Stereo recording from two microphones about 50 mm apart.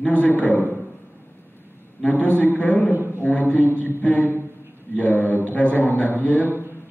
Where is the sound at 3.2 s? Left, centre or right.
Left.